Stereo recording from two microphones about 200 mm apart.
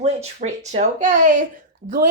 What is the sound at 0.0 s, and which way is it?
A woman's voice, 35° right (ahead or behind).